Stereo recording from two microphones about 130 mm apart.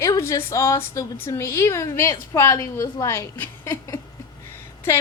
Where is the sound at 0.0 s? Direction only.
20° left (ahead or behind).